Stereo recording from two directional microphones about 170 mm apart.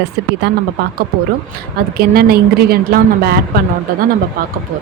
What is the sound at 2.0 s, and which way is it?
A woman's voice, 65° right (ahead or behind).